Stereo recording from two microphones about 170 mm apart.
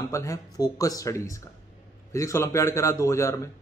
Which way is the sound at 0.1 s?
20° left (ahead or behind).